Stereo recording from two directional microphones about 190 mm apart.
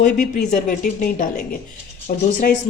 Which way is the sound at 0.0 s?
45° left (ahead or behind).